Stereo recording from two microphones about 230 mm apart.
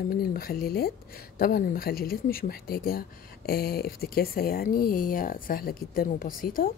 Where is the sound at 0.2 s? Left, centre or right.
Left.